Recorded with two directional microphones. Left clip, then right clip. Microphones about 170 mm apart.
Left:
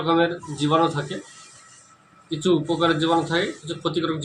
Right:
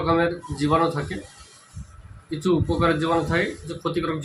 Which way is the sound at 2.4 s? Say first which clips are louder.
Left 1 dB; centre (ahead or behind).